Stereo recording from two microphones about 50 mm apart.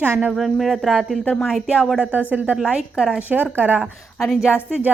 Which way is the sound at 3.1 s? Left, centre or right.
Right.